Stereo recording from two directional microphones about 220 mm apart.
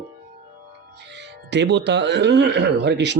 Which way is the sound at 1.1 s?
50° right (ahead or behind).